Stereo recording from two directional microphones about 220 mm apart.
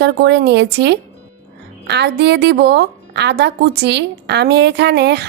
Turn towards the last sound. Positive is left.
turn(degrees=-50)  # may be behind; listen again after turning